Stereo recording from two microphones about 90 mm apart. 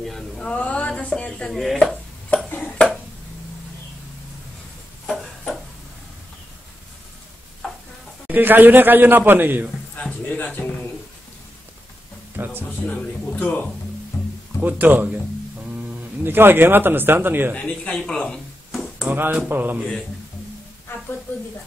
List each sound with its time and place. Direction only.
0.0 s a sound: 5° left (ahead or behind)
1.5 s speech: centre (ahead or behind)
2.3 s a sound: 15° left (ahead or behind)
5.0 s a sound: 5° left (ahead or behind)
7.6 s stir: centre (ahead or behind)
8.3 s a man's voice: 20° right (ahead or behind)
9.9 s a sound: 15° left (ahead or behind)
12.4 s music: 25° right (ahead or behind)
12.8 s speech: 10° left (ahead or behind)
14.1 s music: centre (ahead or behind)
14.6 s a man's voice: 20° right (ahead or behind)
16.3 s a man's voice: 25° right (ahead or behind)
17.6 s speech: 10° left (ahead or behind)
19.0 s a man's voice: 20° right (ahead or behind)